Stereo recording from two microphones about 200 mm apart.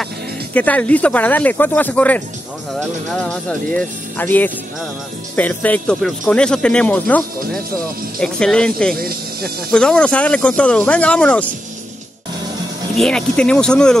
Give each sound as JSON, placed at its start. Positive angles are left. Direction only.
{"t": 0.6, "sound": "speech", "side_deg": 5}
{"t": 8.9, "sound": "speech", "side_deg": -50}
{"t": 9.7, "sound": "speech", "side_deg": 5}
{"t": 12.9, "sound": "speech", "side_deg": 5}